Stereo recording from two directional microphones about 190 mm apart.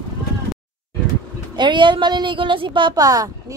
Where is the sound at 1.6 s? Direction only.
25° right (ahead or behind).